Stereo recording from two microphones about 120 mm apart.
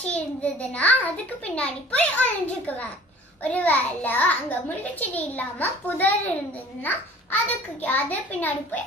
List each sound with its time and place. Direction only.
0.0 s a child's voice: 10° left (ahead or behind)
7.8 s a child's voice: 15° left (ahead or behind)